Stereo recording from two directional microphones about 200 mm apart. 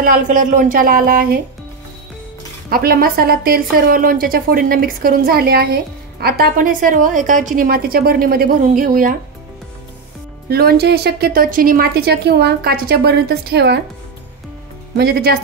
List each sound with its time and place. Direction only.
0.0 s a woman's voice: 45° right (ahead or behind)
2.7 s a woman's voice: 50° right (ahead or behind)
10.5 s a woman's voice: 50° right (ahead or behind)
15.0 s a woman's voice: 50° right (ahead or behind)